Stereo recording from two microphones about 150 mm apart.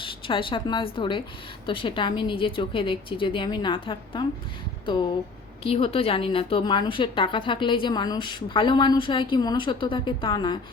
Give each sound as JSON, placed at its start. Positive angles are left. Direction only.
{"t": 0.0, "sound": "a woman's voice", "side_deg": 35}
{"t": 5.6, "sound": "a woman's voice", "side_deg": 40}